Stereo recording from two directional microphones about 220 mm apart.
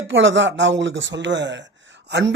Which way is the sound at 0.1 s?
60° right (ahead or behind).